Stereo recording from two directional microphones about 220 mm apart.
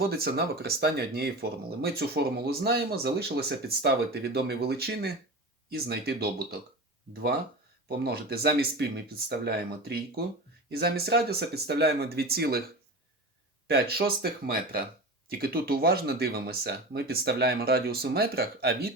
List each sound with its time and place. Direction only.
0.0 s speech: 45° right (ahead or behind)
7.9 s speech: 45° right (ahead or behind)
13.7 s speech: 45° right (ahead or behind)